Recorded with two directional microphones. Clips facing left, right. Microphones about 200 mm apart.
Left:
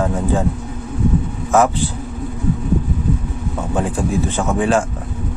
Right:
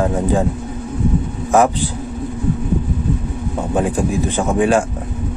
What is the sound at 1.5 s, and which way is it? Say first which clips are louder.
Speech: right 1 dB; 15° right (ahead or behind).